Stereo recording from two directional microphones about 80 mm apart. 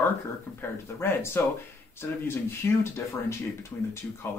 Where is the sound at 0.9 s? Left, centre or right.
Left.